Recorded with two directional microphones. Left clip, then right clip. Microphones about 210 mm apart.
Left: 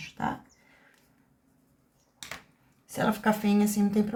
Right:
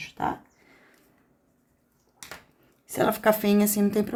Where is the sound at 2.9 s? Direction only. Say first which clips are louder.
Right 5 dB; 45° right (ahead or behind).